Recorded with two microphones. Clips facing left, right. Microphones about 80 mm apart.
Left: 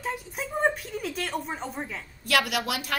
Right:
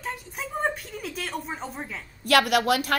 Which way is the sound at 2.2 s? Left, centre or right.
Right.